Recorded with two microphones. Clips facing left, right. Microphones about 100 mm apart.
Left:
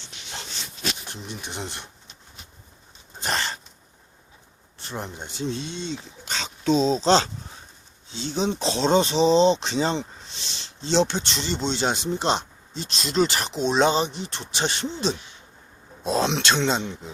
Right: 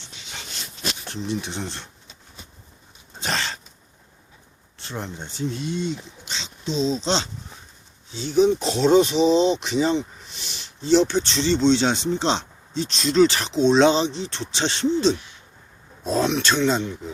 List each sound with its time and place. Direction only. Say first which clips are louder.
1.1 s speech: right 7 dB; 5° left (ahead or behind)
3.2 s dog: even; 5° left (ahead or behind)
4.9 s speech: right 1 dB; 10° left (ahead or behind)
5.5 s speech: right 4 dB; 25° left (ahead or behind)
6.2 s speech: left 7 dB; 50° left (ahead or behind)
8.3 s speech: right 7 dB; 25° left (ahead or behind)
9.6 s a sound: right 3 dB; 30° left (ahead or behind)
10.8 s speech: right 4 dB; 20° left (ahead or behind)